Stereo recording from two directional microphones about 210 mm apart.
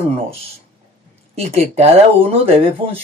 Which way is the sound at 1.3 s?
30° right (ahead or behind).